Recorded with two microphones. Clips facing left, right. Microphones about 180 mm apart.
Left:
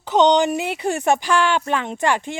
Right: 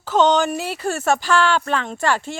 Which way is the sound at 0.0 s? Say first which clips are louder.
Left 1 dB; 15° left (ahead or behind).